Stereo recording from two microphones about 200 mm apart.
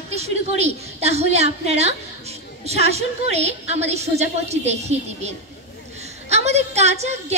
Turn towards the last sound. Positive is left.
turn(degrees=-35)  # may be behind; listen again after turning